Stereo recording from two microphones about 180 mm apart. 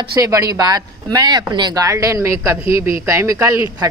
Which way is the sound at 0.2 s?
20° right (ahead or behind).